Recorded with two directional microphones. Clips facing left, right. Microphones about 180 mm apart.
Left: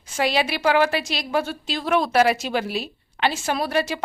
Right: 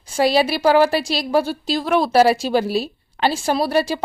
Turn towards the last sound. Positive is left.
turn(degrees=-35)  # may be behind; listen again after turning